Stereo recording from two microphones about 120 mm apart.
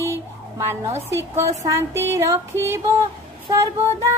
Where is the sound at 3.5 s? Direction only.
25° right (ahead or behind).